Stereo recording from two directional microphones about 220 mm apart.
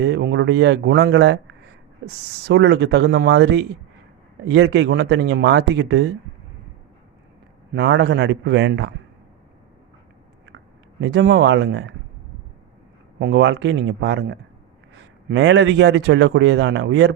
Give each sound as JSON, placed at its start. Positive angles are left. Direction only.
{"t": 0.0, "sound": "speech", "side_deg": -50}
{"t": 2.5, "sound": "speech", "side_deg": -50}
{"t": 7.7, "sound": "speech", "side_deg": -50}
{"t": 11.0, "sound": "speech", "side_deg": -55}
{"t": 13.1, "sound": "speech", "side_deg": -55}